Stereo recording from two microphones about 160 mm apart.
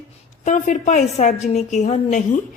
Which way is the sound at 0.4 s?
50° left (ahead or behind).